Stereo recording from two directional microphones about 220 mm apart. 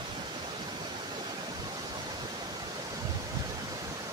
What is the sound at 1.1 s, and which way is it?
Waterfall, 20° right (ahead or behind).